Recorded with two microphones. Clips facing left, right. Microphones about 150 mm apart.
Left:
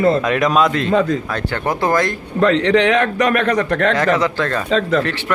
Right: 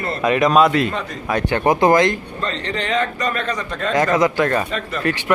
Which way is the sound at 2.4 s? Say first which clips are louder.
Left 13 dB; 90° left.